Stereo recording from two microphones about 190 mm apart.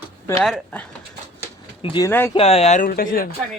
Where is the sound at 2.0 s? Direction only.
10° left (ahead or behind).